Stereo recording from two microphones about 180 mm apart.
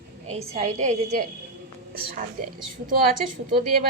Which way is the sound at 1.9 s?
55° right (ahead or behind).